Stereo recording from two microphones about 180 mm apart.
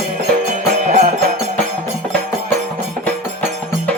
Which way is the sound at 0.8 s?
40° right (ahead or behind).